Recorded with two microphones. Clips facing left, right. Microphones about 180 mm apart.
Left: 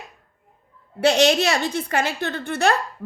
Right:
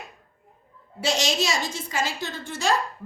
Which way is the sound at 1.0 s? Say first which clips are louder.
Left 8 dB; 60° left (ahead or behind).